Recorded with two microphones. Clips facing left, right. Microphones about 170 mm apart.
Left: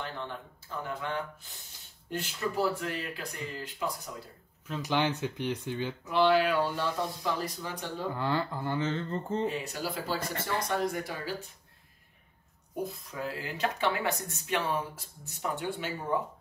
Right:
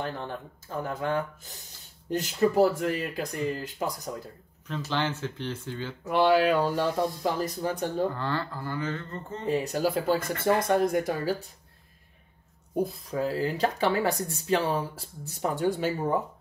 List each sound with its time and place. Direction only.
0.8 s speech: 45° right (ahead or behind)
4.8 s speech: 15° left (ahead or behind)
6.0 s speech: 50° right (ahead or behind)
8.1 s speech: 15° left (ahead or behind)
9.5 s speech: 40° right (ahead or behind)
13.1 s speech: 35° right (ahead or behind)